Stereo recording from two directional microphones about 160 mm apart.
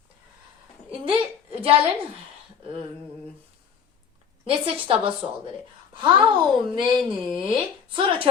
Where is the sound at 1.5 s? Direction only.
35° right (ahead or behind).